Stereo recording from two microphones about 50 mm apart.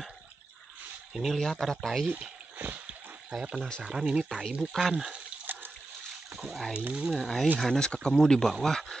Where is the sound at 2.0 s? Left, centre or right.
Right.